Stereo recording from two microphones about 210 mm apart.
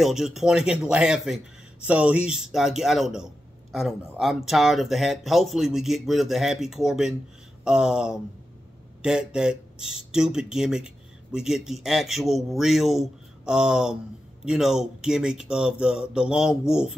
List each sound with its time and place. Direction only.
0.0 s speech: centre (ahead or behind)